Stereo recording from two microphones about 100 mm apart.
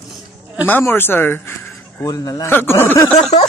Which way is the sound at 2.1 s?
40° left (ahead or behind).